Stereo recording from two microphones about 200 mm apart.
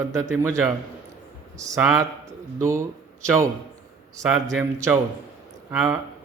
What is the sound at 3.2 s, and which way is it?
Speech, 15° right (ahead or behind).